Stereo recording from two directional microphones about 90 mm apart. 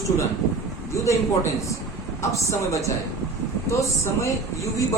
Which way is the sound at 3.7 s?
35° left (ahead or behind).